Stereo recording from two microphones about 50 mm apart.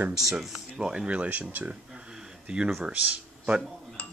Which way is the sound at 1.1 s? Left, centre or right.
Right.